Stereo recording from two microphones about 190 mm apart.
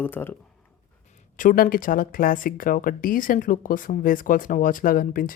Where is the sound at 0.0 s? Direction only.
10° left (ahead or behind).